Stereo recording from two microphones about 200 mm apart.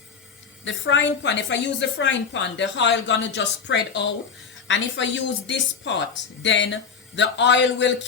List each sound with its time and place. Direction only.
0.6 s a woman's voice: 65° left (ahead or behind)